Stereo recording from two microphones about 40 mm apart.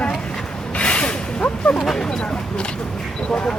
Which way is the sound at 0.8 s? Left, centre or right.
Left.